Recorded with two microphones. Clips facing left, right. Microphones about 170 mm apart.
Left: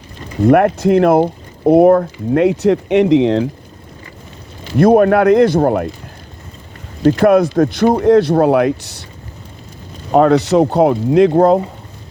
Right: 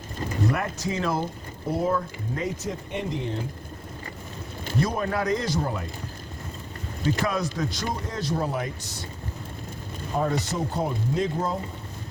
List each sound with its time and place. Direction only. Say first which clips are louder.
0.4 s speech: left 18 dB; 60° left (ahead or behind); by 3.5 s 90° left
4.8 s speech: left 17 dB; 65° left (ahead or behind)
7.0 s speech: left 16 dB; 60° left (ahead or behind)
10.1 s speech: left 16 dB; 80° left